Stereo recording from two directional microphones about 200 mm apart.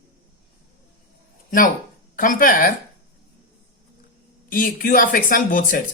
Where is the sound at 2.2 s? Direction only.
40° left (ahead or behind).